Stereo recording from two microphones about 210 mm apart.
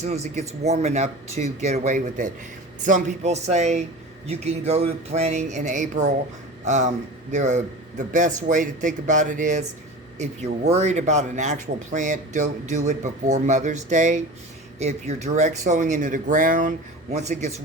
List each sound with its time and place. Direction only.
0.0 s a man's voice: 30° right (ahead or behind)